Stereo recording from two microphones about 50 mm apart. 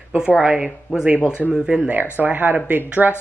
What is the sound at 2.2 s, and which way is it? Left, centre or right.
Speech, right.